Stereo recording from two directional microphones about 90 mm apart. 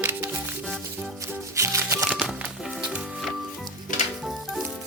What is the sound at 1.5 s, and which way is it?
Music, 30° right (ahead or behind).